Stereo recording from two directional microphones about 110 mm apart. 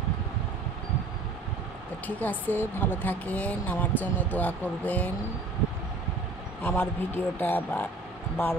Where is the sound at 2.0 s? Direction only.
15° left (ahead or behind).